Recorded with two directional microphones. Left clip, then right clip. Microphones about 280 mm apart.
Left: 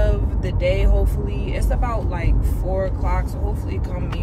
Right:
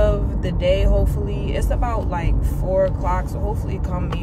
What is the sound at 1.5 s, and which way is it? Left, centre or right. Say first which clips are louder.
Speech: right 2 dB; centre.